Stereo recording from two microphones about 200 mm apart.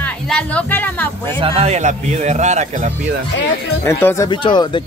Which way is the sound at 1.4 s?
30° right (ahead or behind).